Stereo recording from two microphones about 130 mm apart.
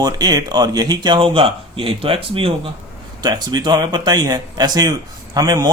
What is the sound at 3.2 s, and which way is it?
A man's voice, 30° right (ahead or behind).